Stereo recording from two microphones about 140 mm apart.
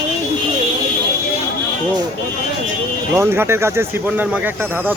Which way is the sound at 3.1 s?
15° right (ahead or behind).